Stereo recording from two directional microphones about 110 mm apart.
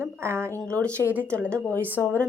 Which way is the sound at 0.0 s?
20° right (ahead or behind).